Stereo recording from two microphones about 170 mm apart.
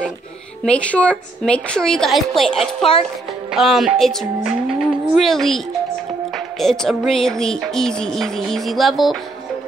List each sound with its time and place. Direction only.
0.7 s music: 5° left (ahead or behind)
3.5 s speech: centre (ahead or behind)
6.3 s music: centre (ahead or behind)